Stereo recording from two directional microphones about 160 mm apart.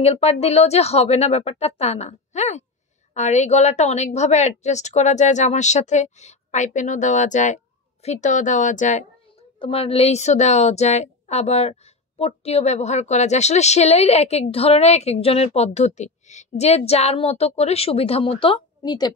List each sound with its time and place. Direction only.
0.0 s a woman's voice: 40° left (ahead or behind)
9.6 s a woman's voice: 35° left (ahead or behind)